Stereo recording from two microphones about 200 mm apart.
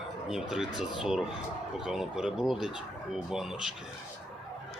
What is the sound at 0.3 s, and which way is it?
Speech, centre (ahead or behind).